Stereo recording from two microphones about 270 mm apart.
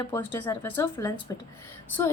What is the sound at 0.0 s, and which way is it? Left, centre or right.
A woman's voice, centre.